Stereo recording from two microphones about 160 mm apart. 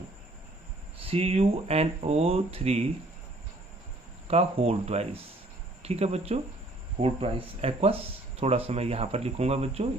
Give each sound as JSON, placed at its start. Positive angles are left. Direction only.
{"t": 1.0, "sound": "speech", "side_deg": -40}
{"t": 4.3, "sound": "speech", "side_deg": -40}